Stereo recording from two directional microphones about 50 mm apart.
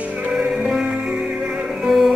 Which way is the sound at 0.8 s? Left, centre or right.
Centre.